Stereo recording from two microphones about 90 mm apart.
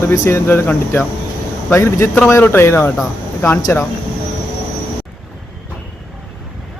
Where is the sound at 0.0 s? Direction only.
30° left (ahead or behind).